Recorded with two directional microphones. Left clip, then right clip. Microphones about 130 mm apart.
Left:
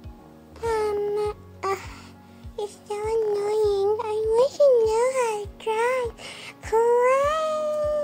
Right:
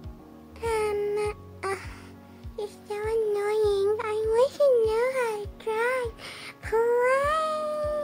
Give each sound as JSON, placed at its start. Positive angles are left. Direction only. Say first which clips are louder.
{"t": 0.6, "sound": "music", "louder": "left 2 dB", "side_deg": 0}
{"t": 1.6, "sound": "music", "louder": "left 5 dB", "side_deg": 25}
{"t": 3.3, "sound": "a sound", "louder": "left 2 dB", "side_deg": -10}
{"t": 4.8, "sound": "music", "louder": "left 3 dB", "side_deg": 15}